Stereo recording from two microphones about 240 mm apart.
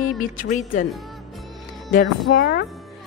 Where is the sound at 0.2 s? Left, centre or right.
Left.